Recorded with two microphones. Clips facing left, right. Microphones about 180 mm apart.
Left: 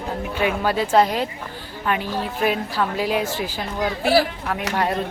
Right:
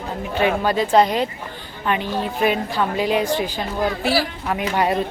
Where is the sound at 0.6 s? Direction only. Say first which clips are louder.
Even; 5° left (ahead or behind).